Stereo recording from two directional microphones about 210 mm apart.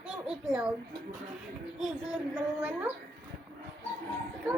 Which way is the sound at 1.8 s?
5° right (ahead or behind).